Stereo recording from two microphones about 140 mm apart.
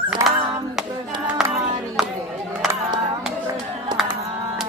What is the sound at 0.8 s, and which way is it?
Clapping, centre (ahead or behind).